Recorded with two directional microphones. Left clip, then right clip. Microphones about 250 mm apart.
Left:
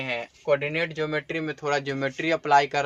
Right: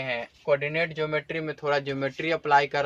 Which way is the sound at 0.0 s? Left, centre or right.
Left.